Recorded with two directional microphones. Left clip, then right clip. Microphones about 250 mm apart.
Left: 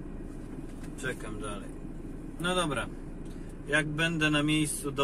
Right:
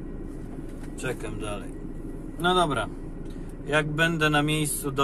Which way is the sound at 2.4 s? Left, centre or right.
Right.